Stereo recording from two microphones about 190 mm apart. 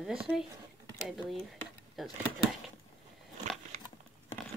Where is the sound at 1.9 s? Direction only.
Centre (ahead or behind).